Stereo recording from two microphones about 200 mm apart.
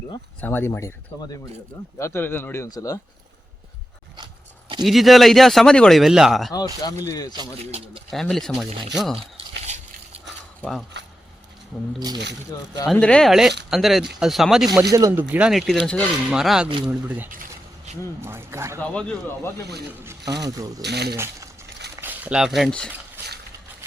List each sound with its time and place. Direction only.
0.4 s speech: 10° left (ahead or behind)
4.8 s speech: centre (ahead or behind)
6.8 s speech: 15° left (ahead or behind)
8.1 s speech: centre (ahead or behind)
10.6 s speech: centre (ahead or behind)
12.5 s speech: 15° left (ahead or behind)
12.9 s speech: 5° left (ahead or behind)
14.9 s speech: 10° right (ahead or behind)
17.3 s a sound: 45° right (ahead or behind)
18.2 s speech: 10° right (ahead or behind)
18.8 s speech: 5° left (ahead or behind)
19.9 s speech: 10° right (ahead or behind)
20.8 s speech: 55° right (ahead or behind)
22.0 s speech: 5° right (ahead or behind)